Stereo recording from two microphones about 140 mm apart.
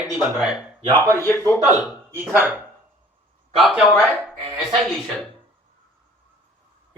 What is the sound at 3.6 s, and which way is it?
Speech, centre (ahead or behind).